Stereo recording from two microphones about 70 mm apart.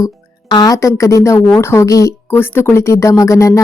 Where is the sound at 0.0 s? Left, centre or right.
Left.